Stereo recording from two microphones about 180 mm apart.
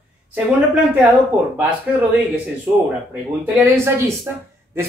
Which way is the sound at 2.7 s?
10° right (ahead or behind).